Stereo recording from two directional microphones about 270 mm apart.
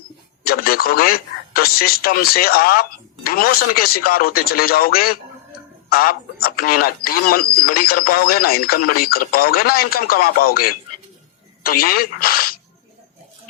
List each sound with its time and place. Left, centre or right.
0.4 s speech: left